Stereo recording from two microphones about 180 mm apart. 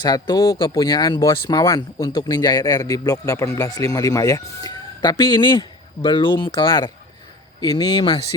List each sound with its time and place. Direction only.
0.0 s speech: 20° left (ahead or behind)